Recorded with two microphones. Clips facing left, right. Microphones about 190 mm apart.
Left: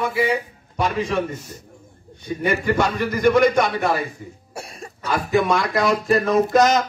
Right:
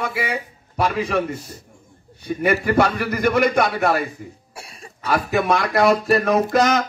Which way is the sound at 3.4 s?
55° right (ahead or behind).